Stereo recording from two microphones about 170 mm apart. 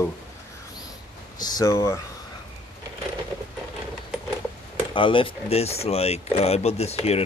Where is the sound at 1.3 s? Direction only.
25° left (ahead or behind).